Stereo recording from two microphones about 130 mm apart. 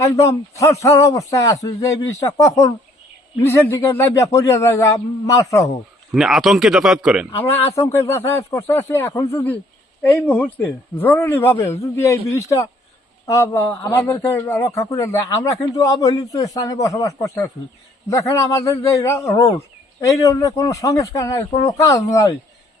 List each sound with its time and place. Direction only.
0.0 s a man's voice: 25° left (ahead or behind)
6.1 s a man's voice: 5° right (ahead or behind)
7.3 s a man's voice: 20° left (ahead or behind)